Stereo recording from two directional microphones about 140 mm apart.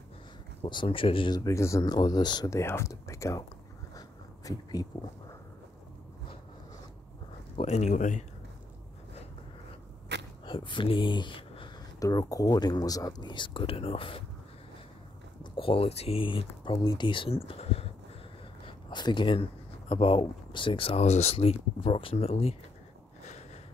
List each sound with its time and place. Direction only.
0.7 s speech: 35° left (ahead or behind)
1.4 s speech: 20° left (ahead or behind)
4.5 s speech: 25° left (ahead or behind)
7.5 s speech: 50° left (ahead or behind)
10.4 s speech: 35° left (ahead or behind)
12.0 s speech: 25° left (ahead or behind)
15.5 s speech: 40° left (ahead or behind)
18.7 s speech: 35° left (ahead or behind)
23.2 s a sound: 55° left (ahead or behind)